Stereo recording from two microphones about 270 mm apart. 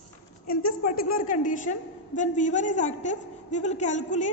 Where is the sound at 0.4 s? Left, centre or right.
Left.